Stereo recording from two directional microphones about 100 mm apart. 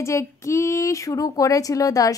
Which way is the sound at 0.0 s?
30° left (ahead or behind).